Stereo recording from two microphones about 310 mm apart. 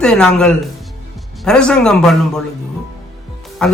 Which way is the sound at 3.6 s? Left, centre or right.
Centre.